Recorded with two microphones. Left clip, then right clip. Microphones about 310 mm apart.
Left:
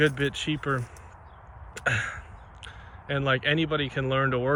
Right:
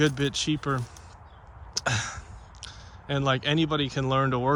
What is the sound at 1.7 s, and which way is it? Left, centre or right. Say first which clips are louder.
Throat clearing: left 1 dB; centre.